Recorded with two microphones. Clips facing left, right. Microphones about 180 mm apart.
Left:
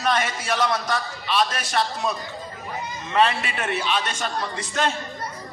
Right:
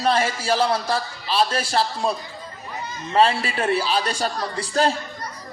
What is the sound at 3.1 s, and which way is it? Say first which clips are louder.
A man's voice: right 2 dB; 30° right (ahead or behind).